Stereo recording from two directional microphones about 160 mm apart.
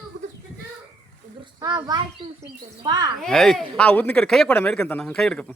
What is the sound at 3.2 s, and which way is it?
Speech, 5° left (ahead or behind).